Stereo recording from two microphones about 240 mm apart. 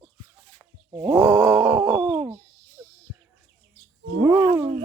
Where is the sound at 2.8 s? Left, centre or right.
Centre.